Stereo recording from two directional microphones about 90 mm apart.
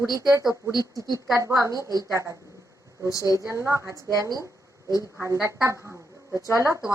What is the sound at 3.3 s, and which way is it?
A woman's voice, 35° right (ahead or behind).